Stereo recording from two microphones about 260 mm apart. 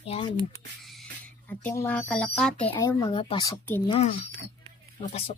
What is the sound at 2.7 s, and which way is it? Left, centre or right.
Speech, centre.